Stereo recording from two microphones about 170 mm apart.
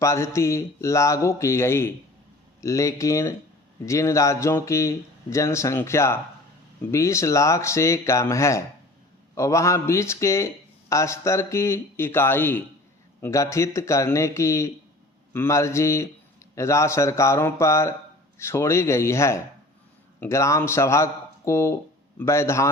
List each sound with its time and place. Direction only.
0.0 s a man's voice: 15° left (ahead or behind)